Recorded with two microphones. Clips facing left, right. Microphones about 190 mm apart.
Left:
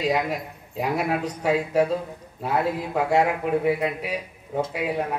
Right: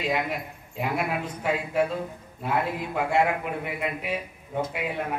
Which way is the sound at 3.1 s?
40° left (ahead or behind).